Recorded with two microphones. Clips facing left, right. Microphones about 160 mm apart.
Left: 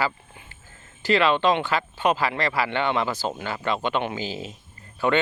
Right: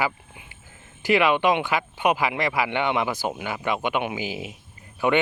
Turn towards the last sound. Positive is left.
turn(degrees=-15)  # may be behind; listen again after turning